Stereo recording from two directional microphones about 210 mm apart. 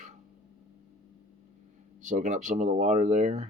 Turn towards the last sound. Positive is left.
turn(degrees=-35)  # may be behind; listen again after turning